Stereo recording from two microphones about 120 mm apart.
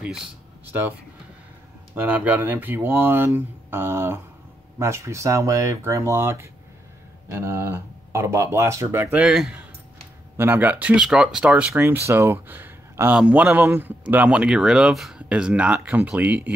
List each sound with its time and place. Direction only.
2.0 s a man's voice: 15° right (ahead or behind)
9.2 s a man's voice: 5° right (ahead or behind)